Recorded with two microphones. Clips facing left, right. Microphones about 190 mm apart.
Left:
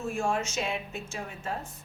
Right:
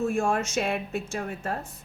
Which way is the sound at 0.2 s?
50° right (ahead or behind).